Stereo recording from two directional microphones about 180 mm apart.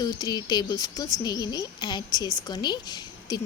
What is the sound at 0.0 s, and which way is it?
A woman's voice, 20° left (ahead or behind).